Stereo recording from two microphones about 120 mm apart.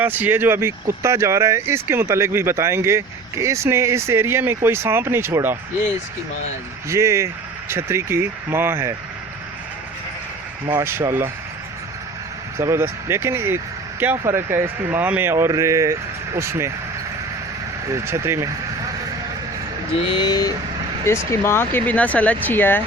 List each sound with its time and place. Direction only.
0.0 s speech: 15° right (ahead or behind)
6.8 s speech: 25° right (ahead or behind)
10.8 s speech: 25° right (ahead or behind)
12.5 s speech: 20° right (ahead or behind)
17.8 s speech: 25° right (ahead or behind)
20.1 s speech: 35° left (ahead or behind)
21.2 s speech: 20° left (ahead or behind)